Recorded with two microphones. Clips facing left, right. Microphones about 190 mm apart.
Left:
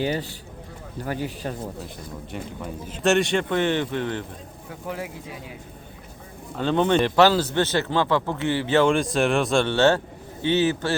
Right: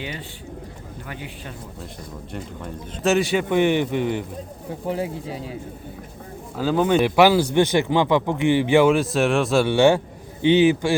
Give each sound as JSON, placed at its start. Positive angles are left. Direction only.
{"t": 0.0, "sound": "speech", "side_deg": 40}
{"t": 2.3, "sound": "speech", "side_deg": 0}
{"t": 4.7, "sound": "speech", "side_deg": -30}
{"t": 6.6, "sound": "speech", "side_deg": -5}